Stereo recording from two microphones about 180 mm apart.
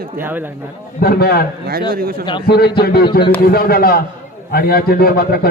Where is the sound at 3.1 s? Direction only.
60° left (ahead or behind).